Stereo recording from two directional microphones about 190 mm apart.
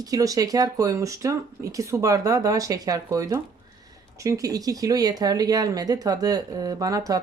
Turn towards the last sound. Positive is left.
turn(degrees=-20)  # may be behind; listen again after turning